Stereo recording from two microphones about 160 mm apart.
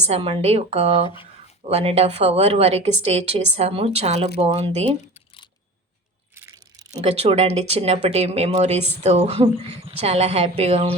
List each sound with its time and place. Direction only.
0.1 s speech: 40° right (ahead or behind)
1.0 s speech: 35° left (ahead or behind)
1.7 s speech: 40° right (ahead or behind)
6.3 s a sound: 20° right (ahead or behind)
7.0 s speech: 40° right (ahead or behind)